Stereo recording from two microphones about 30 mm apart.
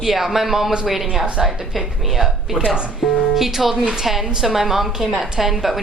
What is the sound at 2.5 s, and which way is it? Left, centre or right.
Speech, right.